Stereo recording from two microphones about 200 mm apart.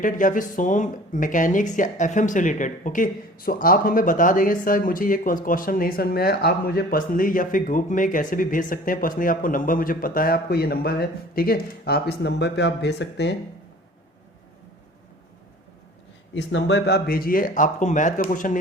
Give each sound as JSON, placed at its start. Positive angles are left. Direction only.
{"t": 0.0, "sound": "speech", "side_deg": 40}
{"t": 16.3, "sound": "speech", "side_deg": 65}